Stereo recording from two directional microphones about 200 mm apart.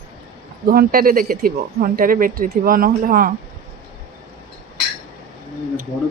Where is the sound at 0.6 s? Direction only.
45° right (ahead or behind).